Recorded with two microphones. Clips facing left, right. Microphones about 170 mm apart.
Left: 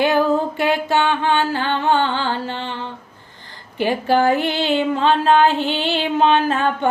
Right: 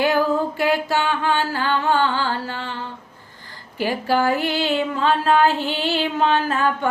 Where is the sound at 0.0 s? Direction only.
20° left (ahead or behind).